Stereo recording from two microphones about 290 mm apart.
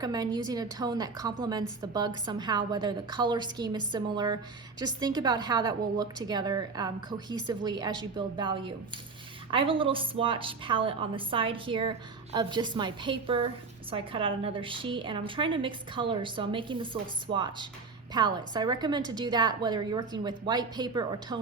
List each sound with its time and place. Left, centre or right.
0.0 s a woman's voice: centre